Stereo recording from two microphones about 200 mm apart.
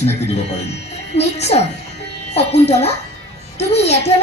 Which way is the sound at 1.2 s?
30° left (ahead or behind).